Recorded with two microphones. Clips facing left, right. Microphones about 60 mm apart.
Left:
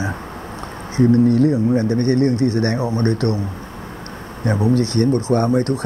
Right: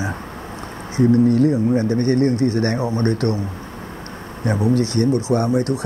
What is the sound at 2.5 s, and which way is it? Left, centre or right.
Speech, left.